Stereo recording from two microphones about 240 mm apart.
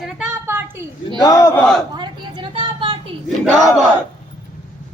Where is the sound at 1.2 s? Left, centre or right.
Centre.